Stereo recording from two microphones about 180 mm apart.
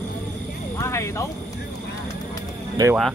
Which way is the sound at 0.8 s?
15° left (ahead or behind).